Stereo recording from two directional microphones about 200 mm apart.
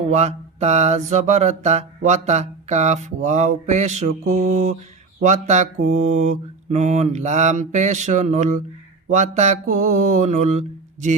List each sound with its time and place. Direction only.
0.1 s mantra: 35° right (ahead or behind)